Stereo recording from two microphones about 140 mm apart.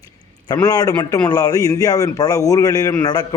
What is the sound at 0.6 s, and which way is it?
A man's voice, 25° left (ahead or behind).